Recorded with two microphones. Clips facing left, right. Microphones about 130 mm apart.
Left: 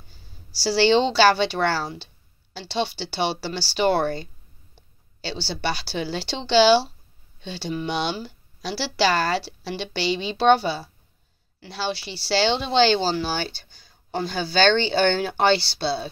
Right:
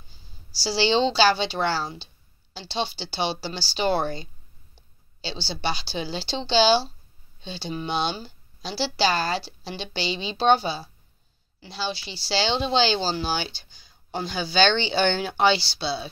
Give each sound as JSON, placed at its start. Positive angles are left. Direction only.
{"t": 0.1, "sound": "a woman's voice", "side_deg": 60}